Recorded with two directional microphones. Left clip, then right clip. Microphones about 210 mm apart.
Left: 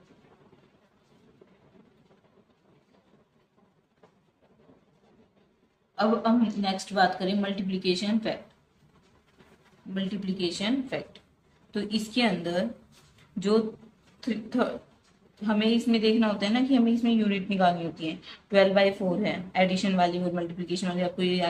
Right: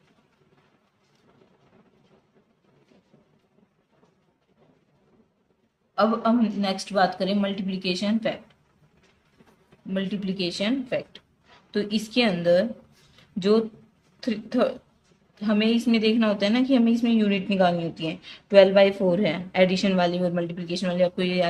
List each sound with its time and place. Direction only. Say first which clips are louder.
6.0 s a woman's voice: right 3 dB; 55° right (ahead or behind)
9.9 s speech: right 4 dB; 55° right (ahead or behind)
14.2 s a woman's voice: right 4 dB; 55° right (ahead or behind)